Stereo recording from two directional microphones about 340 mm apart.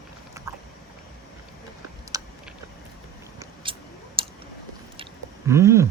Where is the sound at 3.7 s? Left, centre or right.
Centre.